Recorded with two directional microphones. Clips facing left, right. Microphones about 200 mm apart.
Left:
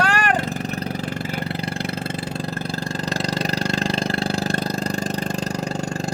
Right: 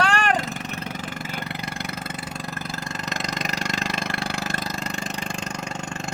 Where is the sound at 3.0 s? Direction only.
30° left (ahead or behind).